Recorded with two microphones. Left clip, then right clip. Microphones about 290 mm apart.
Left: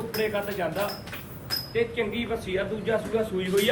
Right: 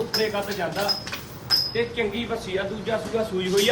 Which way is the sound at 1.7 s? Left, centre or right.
Centre.